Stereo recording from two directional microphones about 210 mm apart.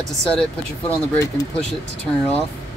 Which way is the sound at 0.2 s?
5° left (ahead or behind).